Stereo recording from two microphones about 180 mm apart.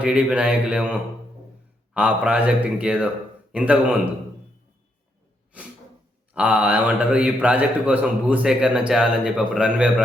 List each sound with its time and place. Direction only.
0.0 s a man's voice: 5° right (ahead or behind)
1.9 s a man's voice: 5° right (ahead or behind)
6.3 s a man's voice: 5° right (ahead or behind)